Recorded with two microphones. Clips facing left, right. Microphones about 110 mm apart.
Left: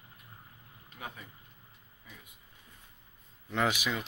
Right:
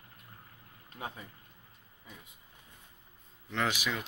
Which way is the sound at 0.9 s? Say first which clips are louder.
Right 3 dB; 30° right (ahead or behind).